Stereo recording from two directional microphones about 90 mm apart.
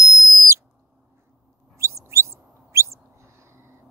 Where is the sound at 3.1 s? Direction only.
30° right (ahead or behind).